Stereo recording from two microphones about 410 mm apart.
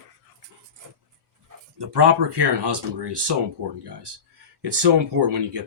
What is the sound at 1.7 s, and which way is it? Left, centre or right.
Speech, right.